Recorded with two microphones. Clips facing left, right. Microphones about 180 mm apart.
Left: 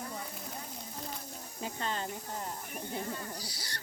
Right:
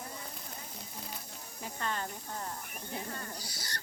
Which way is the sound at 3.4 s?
50° right (ahead or behind).